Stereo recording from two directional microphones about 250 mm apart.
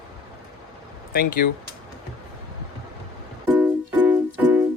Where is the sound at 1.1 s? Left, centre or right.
Left.